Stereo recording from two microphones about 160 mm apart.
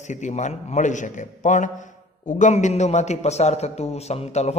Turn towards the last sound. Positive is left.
turn(degrees=40)  # may be behind; listen again after turning